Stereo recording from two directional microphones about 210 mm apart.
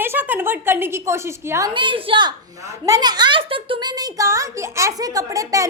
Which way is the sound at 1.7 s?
25° right (ahead or behind).